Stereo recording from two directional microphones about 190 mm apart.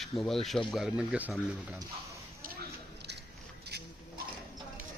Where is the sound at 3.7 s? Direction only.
55° right (ahead or behind).